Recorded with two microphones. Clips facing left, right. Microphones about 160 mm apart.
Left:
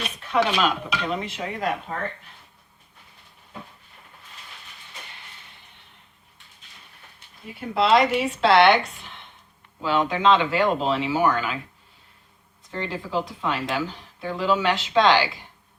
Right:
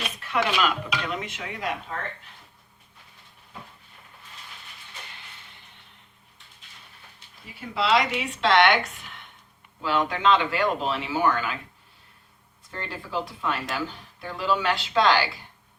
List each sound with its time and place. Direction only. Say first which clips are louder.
0.3 s speech: left 3 dB; 30° left (ahead or behind)
7.7 s speech: left 4 dB; 50° left (ahead or behind)
8.4 s speech: left 3 dB; 35° left (ahead or behind)
9.8 s speech: left 3 dB; 20° left (ahead or behind)
12.7 s speech: left 4 dB; 20° left (ahead or behind)